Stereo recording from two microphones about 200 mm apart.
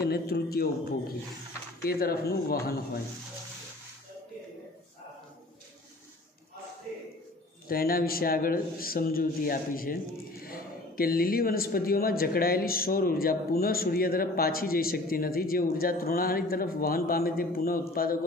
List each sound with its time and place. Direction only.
0.0 s a man's voice: 50° left (ahead or behind)
7.6 s a man's voice: 45° left (ahead or behind)